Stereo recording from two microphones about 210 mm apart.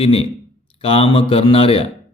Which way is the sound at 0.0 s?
30° left (ahead or behind).